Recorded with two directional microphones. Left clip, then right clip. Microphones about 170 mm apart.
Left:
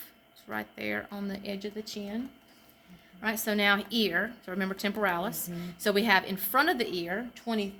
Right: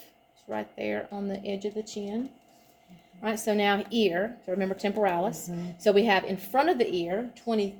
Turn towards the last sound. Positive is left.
turn(degrees=40)  # may be behind; listen again after turning